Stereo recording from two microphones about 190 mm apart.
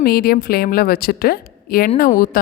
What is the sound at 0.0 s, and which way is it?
A woman's voice, 55° left (ahead or behind).